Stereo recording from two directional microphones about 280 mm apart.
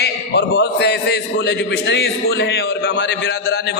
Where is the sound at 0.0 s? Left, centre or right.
Left.